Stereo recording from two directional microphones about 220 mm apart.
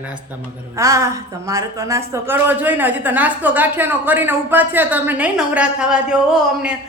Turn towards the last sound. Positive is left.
turn(degrees=-5)  # may be behind; listen again after turning